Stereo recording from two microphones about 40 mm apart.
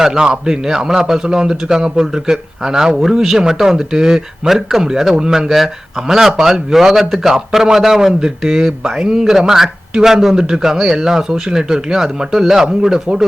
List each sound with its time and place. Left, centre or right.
0.0 s a man's voice: centre
3.0 s a man's voice: centre
5.5 s a man's voice: centre
13.1 s speech: right